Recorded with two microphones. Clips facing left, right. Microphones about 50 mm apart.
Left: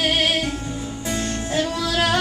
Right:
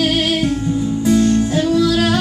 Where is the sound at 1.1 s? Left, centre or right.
Left.